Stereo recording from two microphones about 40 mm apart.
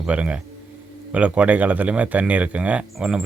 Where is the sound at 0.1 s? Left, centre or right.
Right.